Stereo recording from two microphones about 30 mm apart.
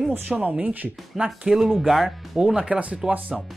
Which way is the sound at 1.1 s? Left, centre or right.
Centre.